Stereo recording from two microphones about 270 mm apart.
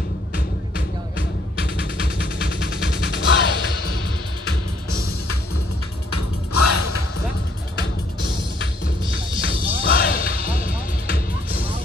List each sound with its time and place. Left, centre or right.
1.6 s music: left
6.1 s music: left
9.0 s music: centre
9.8 s basketball bounce: left
10.5 s music: left